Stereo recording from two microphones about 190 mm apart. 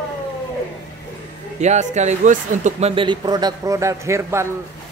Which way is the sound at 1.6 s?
35° right (ahead or behind).